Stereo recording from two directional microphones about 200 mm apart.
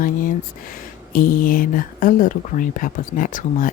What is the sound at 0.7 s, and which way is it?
Speech, 45° left (ahead or behind).